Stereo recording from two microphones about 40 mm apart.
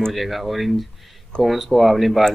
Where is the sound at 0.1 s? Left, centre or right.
Centre.